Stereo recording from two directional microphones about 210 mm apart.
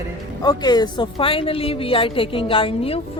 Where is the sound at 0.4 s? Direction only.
20° left (ahead or behind).